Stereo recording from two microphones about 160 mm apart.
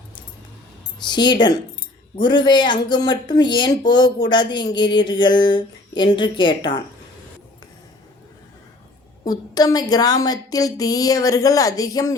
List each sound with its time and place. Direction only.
1.0 s speech: 30° left (ahead or behind)
9.2 s speech: 25° left (ahead or behind)